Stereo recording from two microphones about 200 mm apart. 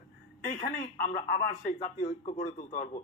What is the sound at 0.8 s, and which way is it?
Speech, 40° left (ahead or behind).